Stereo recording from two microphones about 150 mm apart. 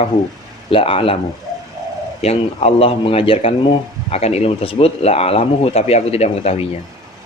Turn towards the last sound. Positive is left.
turn(degrees=45)  # may be behind; listen again after turning